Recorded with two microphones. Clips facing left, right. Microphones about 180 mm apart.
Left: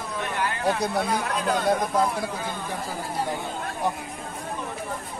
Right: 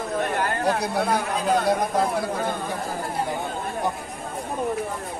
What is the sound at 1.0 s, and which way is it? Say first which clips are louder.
Speech: right 2 dB; 55° right (ahead or behind).